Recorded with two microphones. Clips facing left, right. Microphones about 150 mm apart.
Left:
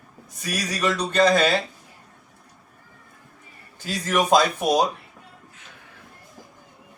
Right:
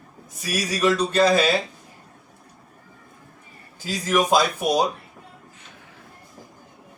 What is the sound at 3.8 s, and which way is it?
Speech, 10° right (ahead or behind).